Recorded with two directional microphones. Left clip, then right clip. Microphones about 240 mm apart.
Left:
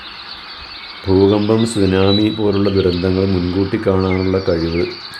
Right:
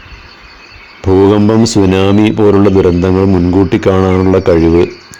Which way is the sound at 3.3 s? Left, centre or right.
Left.